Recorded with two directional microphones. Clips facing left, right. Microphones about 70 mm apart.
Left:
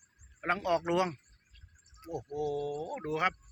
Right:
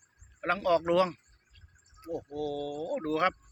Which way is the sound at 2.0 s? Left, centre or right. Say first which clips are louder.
Right 5 dB; centre.